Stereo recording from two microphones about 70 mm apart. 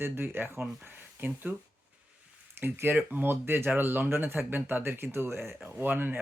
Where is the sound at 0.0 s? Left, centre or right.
Right.